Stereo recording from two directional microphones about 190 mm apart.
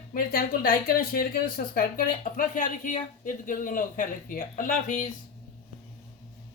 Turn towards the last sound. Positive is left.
turn(degrees=45)  # may be behind; listen again after turning